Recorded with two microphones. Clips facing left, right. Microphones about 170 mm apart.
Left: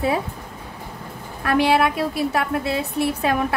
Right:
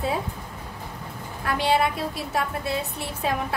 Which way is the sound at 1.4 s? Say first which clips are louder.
Left 5 dB; 65° left (ahead or behind).